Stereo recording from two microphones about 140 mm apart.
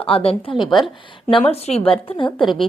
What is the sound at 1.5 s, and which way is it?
Speech, 45° left (ahead or behind).